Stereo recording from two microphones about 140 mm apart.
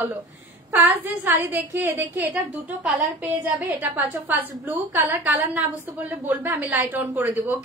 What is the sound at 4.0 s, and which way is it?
A woman's voice, 15° right (ahead or behind).